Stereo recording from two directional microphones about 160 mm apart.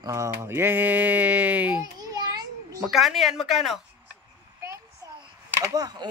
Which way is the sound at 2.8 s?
Centre (ahead or behind).